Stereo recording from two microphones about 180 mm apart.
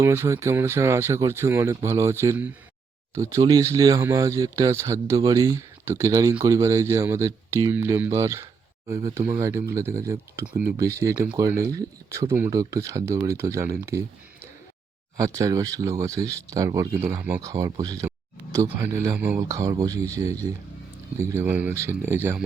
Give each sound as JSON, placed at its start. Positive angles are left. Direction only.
{"t": 0.0, "sound": "speech", "side_deg": -15}
{"t": 15.2, "sound": "speech", "side_deg": -20}